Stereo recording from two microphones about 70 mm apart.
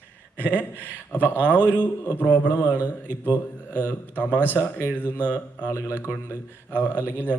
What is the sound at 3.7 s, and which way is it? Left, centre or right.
Speech, left.